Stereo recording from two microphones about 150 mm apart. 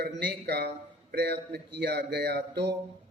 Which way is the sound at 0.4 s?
90° right.